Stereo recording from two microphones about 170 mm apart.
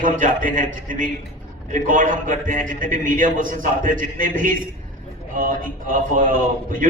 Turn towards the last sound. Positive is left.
turn(degrees=-55)  # may be behind; listen again after turning